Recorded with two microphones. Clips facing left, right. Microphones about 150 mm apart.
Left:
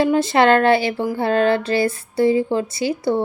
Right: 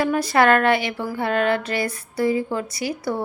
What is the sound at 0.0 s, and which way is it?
Speech, 25° left (ahead or behind).